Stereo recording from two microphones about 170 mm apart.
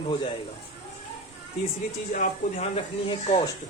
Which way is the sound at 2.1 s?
45° left (ahead or behind).